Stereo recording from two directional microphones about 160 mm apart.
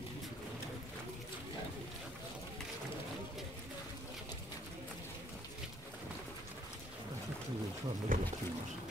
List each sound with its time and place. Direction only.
8.1 s speech: 55° right (ahead or behind)